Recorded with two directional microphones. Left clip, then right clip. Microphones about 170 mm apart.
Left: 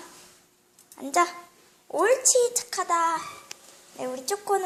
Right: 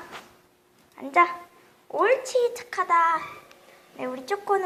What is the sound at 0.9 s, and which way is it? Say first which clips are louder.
A child's voice: right 3 dB; 20° left (ahead or behind).